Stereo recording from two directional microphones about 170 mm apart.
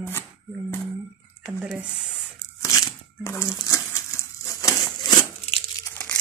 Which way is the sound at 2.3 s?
20° left (ahead or behind).